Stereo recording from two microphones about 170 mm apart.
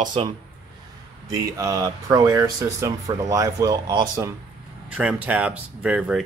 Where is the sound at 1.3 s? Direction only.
20° right (ahead or behind).